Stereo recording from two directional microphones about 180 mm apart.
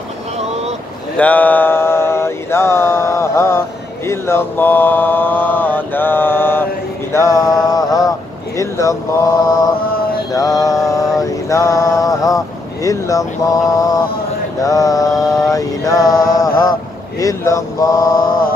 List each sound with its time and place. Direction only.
1.1 s mantra: 10° left (ahead or behind)
8.5 s a sound: 15° left (ahead or behind)
10.3 s mantra: 20° left (ahead or behind)
11.1 s speech: 15° left (ahead or behind)
14.6 s mantra: 20° left (ahead or behind)
17.2 s a sound: 20° left (ahead or behind)